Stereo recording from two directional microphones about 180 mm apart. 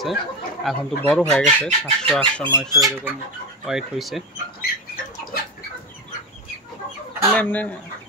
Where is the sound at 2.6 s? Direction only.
20° right (ahead or behind).